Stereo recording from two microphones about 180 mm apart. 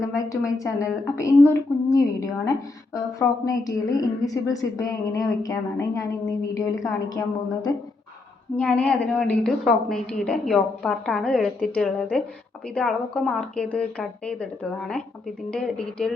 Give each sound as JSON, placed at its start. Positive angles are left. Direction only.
{"t": 0.0, "sound": "a woman's voice", "side_deg": 20}
{"t": 8.5, "sound": "a woman's voice", "side_deg": 10}